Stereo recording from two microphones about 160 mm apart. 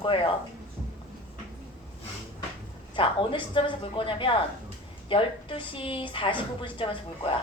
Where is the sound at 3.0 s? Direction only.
30° left (ahead or behind).